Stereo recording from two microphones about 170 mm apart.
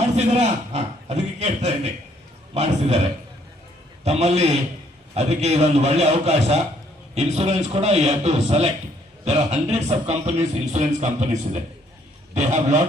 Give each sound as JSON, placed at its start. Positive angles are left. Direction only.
{"t": 0.0, "sound": "a man's voice", "side_deg": -40}
{"t": 4.0, "sound": "a man's voice", "side_deg": -40}